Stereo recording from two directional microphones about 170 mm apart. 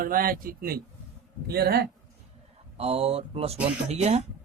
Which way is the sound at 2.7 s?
35° right (ahead or behind).